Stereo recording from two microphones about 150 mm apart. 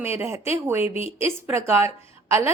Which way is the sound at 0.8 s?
45° left (ahead or behind).